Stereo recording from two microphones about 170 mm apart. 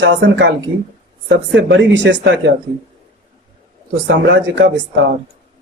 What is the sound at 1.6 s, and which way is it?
Speech, 90° right.